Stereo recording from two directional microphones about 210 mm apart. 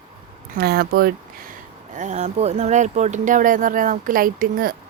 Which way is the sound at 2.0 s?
35° right (ahead or behind).